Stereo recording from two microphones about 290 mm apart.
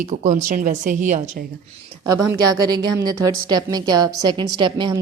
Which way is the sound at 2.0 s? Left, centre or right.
Centre.